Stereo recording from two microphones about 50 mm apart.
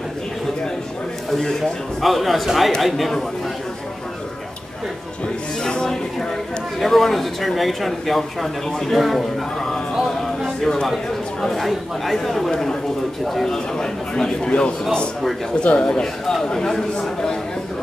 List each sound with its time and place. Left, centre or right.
1.4 s speech: centre
5.6 s a sound: centre
6.8 s speech: centre
10.2 s music: centre
11.4 s a man's voice: centre